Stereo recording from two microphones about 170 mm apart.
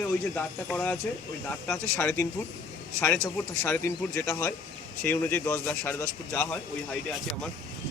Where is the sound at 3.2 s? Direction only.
5° left (ahead or behind).